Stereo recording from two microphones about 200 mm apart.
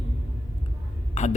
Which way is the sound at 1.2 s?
35° left (ahead or behind).